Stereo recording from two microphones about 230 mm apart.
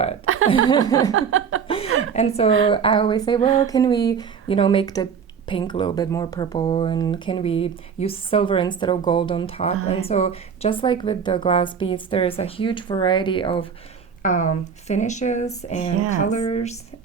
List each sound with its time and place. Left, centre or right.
0.3 s chuckle: right
0.7 s speech: centre
1.1 s a sound: right
1.6 s chuckle: left
2.0 s speech: left
14.2 s speech: left